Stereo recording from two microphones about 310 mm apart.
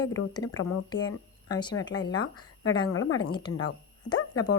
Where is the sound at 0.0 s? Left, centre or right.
Left.